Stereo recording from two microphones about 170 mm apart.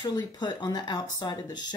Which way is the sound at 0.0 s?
25° left (ahead or behind).